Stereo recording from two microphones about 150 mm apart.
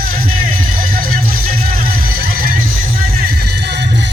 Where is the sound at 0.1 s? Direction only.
70° right (ahead or behind).